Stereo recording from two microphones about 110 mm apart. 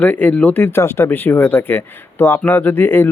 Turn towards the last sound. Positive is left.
turn(degrees=20)  # may be behind; listen again after turning